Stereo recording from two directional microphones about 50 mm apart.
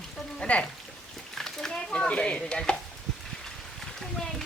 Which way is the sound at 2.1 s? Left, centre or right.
Left.